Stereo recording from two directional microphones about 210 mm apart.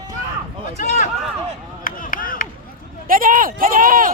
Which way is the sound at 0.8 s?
35° left (ahead or behind).